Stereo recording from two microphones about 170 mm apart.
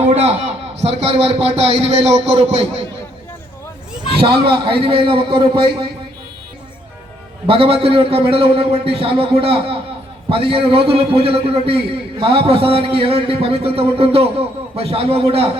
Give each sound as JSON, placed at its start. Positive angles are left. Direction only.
{"t": 0.0, "sound": "a sound", "side_deg": -40}
{"t": 0.8, "sound": "a man's voice", "side_deg": -40}
{"t": 4.2, "sound": "a man's voice", "side_deg": -30}
{"t": 7.4, "sound": "a man's voice", "side_deg": -35}